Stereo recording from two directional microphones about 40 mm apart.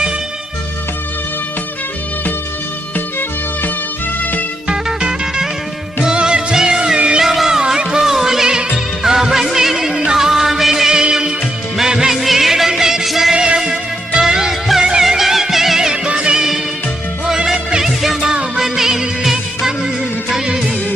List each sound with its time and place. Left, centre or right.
4.2 s music: left
4.7 s music: centre
7.2 s a sound: centre
7.6 s music: centre
8.4 s music: right
10.9 s music: centre
13.3 s music: right
15.9 s music: right